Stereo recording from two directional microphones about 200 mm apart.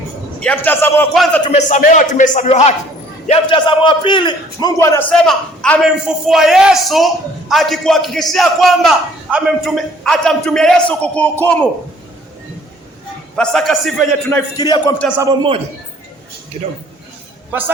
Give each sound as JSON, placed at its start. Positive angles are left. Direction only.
{"t": 0.3, "sound": "a man's voice", "side_deg": 5}
{"t": 1.5, "sound": "a man's voice", "side_deg": 35}
{"t": 13.3, "sound": "a man's voice", "side_deg": 5}
{"t": 14.5, "sound": "a man's voice", "side_deg": 20}
{"t": 15.2, "sound": "a man's voice", "side_deg": -25}